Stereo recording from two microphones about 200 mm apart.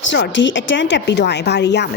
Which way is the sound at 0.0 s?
65° left (ahead or behind).